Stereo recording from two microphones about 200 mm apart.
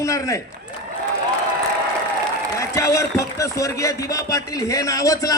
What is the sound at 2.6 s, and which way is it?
A man's voice, 15° left (ahead or behind).